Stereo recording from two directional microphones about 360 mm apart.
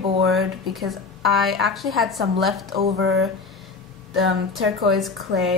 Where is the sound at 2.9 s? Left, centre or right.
Right.